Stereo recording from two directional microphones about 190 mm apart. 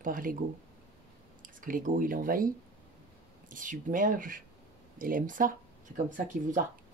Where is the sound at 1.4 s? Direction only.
45° right (ahead or behind).